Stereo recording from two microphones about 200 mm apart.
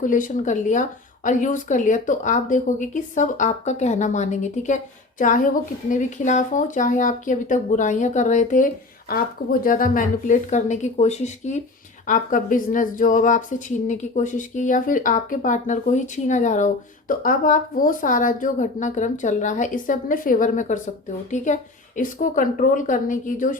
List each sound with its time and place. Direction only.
0.0 s speech: 40° left (ahead or behind)